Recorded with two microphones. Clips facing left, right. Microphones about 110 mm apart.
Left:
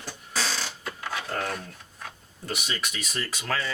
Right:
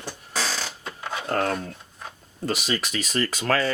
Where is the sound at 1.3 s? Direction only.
60° right (ahead or behind).